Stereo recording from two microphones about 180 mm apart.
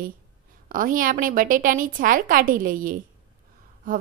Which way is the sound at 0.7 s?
50° right (ahead or behind).